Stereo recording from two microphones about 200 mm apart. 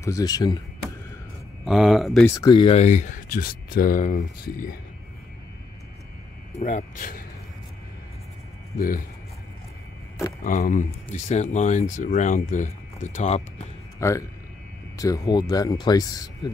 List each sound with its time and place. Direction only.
0.0 s speech: 15° left (ahead or behind)
1.6 s speech: centre (ahead or behind)
2.2 s speech: 15° left (ahead or behind); by 4.7 s 45° left (ahead or behind)
6.6 s speech: 40° left (ahead or behind)
8.7 s speech: 45° left (ahead or behind)
10.4 s speech: 40° left (ahead or behind)
13.9 s speech: 15° left (ahead or behind)